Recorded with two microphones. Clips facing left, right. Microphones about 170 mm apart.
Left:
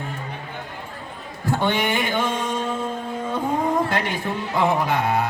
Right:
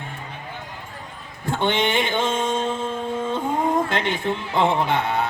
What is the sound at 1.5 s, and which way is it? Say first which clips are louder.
Mantra: even; 25° right (ahead or behind).